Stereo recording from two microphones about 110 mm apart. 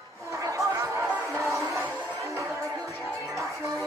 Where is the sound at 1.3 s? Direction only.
25° right (ahead or behind).